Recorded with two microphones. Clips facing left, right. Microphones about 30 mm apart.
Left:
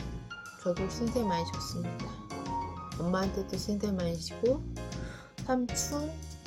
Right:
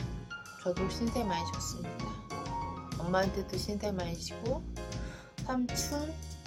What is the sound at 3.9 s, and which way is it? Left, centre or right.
Speech, centre.